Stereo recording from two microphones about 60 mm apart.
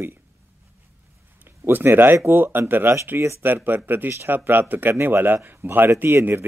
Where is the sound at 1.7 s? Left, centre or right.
Right.